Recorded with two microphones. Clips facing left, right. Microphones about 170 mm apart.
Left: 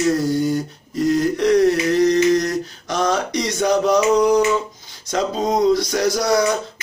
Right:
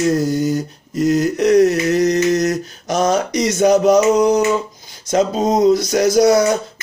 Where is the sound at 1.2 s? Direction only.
45° right (ahead or behind).